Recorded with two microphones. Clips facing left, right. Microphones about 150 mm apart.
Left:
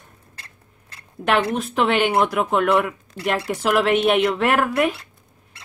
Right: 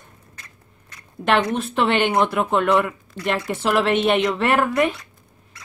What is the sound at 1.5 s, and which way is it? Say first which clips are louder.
A woman's voice: even; 5° left (ahead or behind).